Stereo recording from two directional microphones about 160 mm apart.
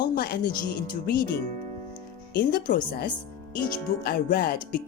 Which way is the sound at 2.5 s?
65° left (ahead or behind).